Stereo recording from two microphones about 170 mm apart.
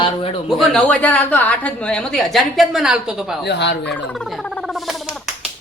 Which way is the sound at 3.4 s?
80° left.